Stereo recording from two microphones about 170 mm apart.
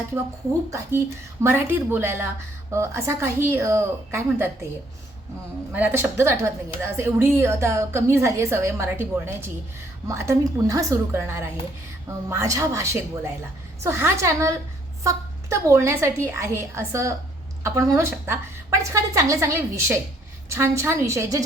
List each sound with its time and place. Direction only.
0.7 s a woman's voice: 15° right (ahead or behind)
5.7 s a woman's voice: 10° right (ahead or behind)